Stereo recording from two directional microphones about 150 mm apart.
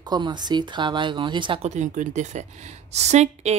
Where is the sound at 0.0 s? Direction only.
30° right (ahead or behind).